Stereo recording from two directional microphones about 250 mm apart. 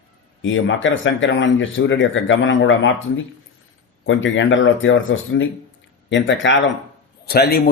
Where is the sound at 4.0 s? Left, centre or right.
Left.